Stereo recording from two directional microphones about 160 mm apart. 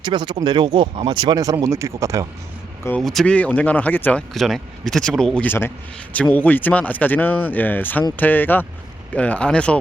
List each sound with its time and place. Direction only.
0.0 s speech: 30° right (ahead or behind)
3.0 s speech: centre (ahead or behind)